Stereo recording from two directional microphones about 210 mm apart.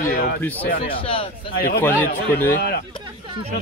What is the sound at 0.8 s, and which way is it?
Speech, 25° left (ahead or behind).